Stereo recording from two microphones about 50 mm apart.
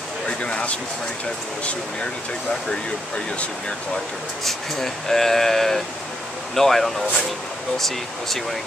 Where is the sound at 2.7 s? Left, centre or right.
Centre.